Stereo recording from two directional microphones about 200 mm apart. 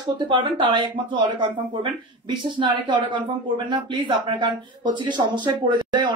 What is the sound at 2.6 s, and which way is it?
Speech, 25° right (ahead or behind).